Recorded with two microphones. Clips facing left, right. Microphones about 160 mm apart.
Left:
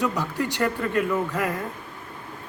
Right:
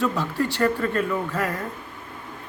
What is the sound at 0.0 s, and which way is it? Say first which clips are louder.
Speech: right 2 dB; 15° left (ahead or behind).